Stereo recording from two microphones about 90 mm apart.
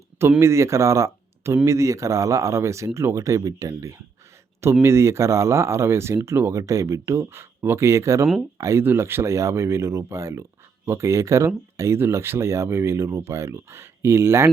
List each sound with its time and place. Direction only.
0.2 s speech: 30° right (ahead or behind)
8.8 s speech: 25° right (ahead or behind)